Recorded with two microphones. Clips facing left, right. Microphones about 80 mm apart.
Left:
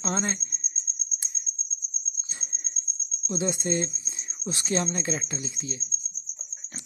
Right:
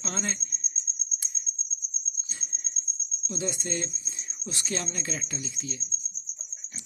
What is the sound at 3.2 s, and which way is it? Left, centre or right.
Speech, left.